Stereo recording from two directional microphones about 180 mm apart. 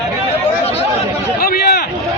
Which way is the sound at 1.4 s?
60° left (ahead or behind).